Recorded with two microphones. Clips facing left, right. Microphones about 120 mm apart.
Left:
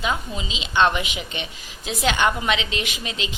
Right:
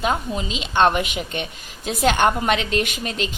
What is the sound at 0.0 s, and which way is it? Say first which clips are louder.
A woman's voice: right 4 dB; 50° right (ahead or behind).